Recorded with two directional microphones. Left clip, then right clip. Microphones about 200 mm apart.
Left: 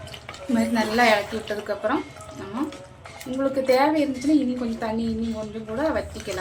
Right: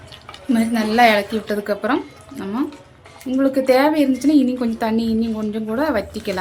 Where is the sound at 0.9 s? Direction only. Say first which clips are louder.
Right 6 dB; 55° right (ahead or behind).